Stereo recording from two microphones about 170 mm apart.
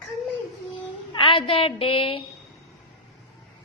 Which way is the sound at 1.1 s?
30° left (ahead or behind).